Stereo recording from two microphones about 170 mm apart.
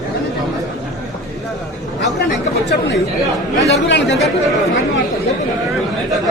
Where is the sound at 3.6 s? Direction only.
90° left.